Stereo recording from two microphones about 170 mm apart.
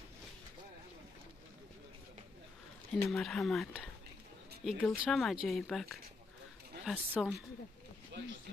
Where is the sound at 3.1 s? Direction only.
Centre (ahead or behind).